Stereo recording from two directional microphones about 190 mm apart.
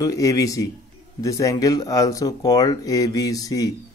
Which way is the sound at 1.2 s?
15° left (ahead or behind).